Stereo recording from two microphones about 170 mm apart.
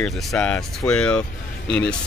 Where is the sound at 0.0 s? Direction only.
5° left (ahead or behind).